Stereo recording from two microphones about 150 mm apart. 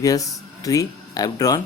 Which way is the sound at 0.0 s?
25° left (ahead or behind).